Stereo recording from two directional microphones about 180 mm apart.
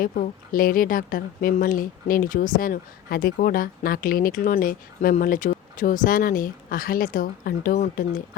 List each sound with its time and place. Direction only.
0.0 s speech: 50° left (ahead or behind)